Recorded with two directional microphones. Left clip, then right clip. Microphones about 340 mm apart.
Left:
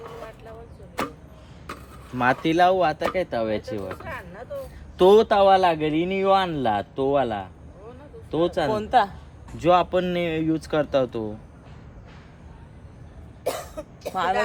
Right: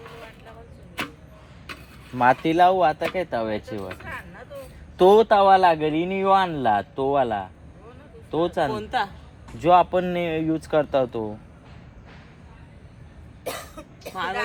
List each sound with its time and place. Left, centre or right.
2.1 s speech: centre
8.7 s a woman's voice: left
9.6 s speech: centre
13.4 s cough: centre